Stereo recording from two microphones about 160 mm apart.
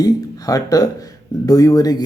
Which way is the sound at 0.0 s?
20° left (ahead or behind).